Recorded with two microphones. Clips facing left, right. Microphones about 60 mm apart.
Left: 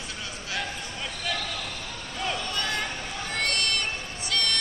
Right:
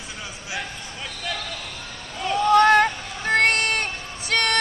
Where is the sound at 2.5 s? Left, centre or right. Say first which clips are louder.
Right 15 dB; right.